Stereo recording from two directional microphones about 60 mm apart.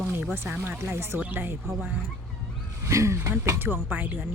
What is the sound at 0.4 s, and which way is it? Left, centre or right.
Speech, right.